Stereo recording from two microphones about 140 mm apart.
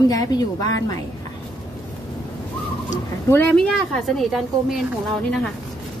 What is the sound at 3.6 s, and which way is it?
Speech, centre (ahead or behind).